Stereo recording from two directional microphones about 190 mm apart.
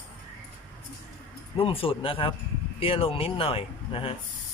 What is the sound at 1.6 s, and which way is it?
Speech, 30° left (ahead or behind).